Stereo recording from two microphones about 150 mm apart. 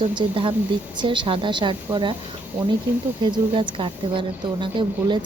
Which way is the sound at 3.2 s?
35° right (ahead or behind).